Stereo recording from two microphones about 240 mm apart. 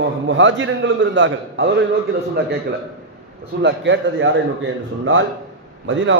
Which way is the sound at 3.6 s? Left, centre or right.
Right.